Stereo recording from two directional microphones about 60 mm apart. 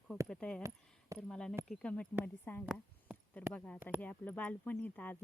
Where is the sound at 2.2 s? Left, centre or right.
Left.